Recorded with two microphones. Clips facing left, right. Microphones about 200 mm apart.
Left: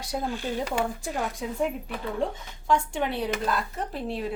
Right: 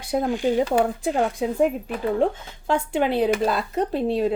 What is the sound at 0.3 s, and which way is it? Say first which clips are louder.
Speech: right 10 dB; 15° right (ahead or behind).